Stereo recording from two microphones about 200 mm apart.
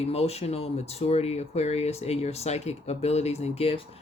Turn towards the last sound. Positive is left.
turn(degrees=30)  # may be behind; listen again after turning